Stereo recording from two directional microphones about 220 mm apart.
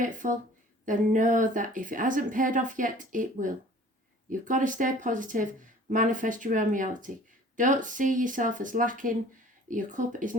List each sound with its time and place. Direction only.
0.0 s speech: 35° right (ahead or behind)